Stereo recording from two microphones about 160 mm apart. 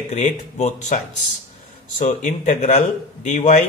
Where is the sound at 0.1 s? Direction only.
45° left (ahead or behind).